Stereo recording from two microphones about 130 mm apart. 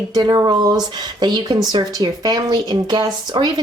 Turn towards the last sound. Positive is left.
turn(degrees=-35)  # may be behind; listen again after turning